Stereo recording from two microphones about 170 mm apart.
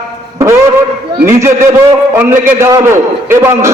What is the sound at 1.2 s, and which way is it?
A man's voice, 15° right (ahead or behind).